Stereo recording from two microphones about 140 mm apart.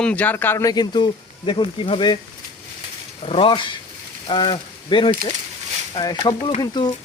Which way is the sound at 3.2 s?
40° left (ahead or behind).